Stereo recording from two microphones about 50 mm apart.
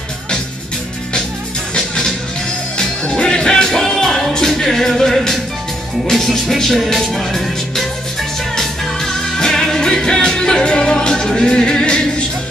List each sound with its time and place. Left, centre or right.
1.8 s music: centre